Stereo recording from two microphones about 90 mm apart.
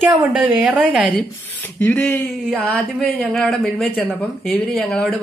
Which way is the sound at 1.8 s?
20° left (ahead or behind).